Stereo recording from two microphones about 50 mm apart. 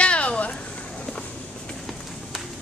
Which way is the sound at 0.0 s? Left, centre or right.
Left.